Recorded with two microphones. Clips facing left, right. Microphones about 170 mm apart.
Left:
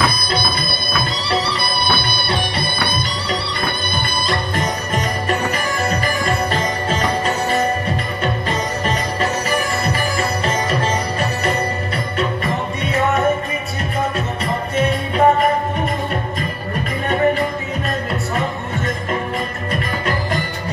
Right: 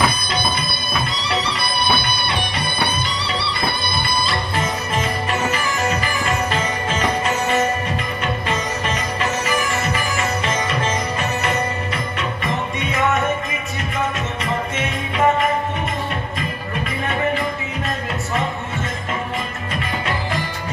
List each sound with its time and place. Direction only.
1.3 s music: 35° left (ahead or behind)
4.3 s music: 40° left (ahead or behind)
14.8 s music: 35° left (ahead or behind)
17.1 s music: 40° left (ahead or behind)